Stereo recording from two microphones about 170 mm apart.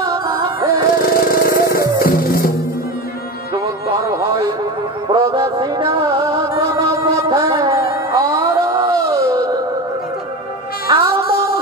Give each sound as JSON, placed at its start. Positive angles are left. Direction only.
{"t": 0.0, "sound": "music", "side_deg": -25}
{"t": 0.7, "sound": "music", "side_deg": 60}
{"t": 5.0, "sound": "music", "side_deg": -30}
{"t": 8.2, "sound": "wail", "side_deg": -20}
{"t": 10.9, "sound": "music", "side_deg": -25}
{"t": 11.2, "sound": "music", "side_deg": 60}